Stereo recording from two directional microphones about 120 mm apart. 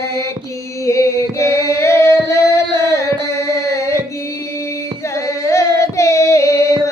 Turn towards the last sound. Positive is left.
turn(degrees=25)  # may be behind; listen again after turning